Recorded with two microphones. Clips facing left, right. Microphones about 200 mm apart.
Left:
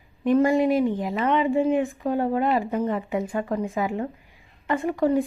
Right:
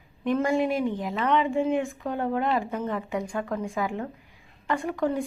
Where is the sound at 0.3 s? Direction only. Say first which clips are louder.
Left 5 dB; 15° left (ahead or behind).